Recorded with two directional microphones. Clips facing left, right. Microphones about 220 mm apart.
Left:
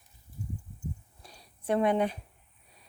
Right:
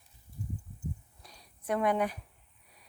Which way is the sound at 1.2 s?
30° left (ahead or behind).